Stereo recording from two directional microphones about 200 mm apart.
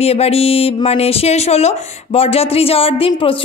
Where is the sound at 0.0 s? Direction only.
30° left (ahead or behind).